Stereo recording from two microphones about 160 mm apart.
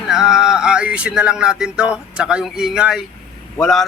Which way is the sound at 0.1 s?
5° right (ahead or behind).